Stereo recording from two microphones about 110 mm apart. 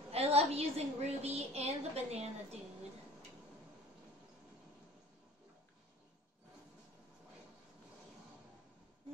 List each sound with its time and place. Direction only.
0.1 s a woman's voice: 70° right (ahead or behind)